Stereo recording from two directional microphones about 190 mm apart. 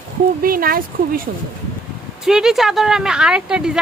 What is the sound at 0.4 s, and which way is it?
Speech, 50° right (ahead or behind).